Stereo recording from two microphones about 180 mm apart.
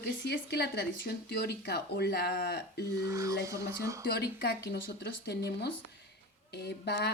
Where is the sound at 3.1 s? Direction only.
15° right (ahead or behind).